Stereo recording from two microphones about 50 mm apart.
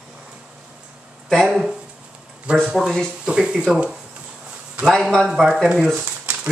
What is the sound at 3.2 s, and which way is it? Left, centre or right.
Speech, right.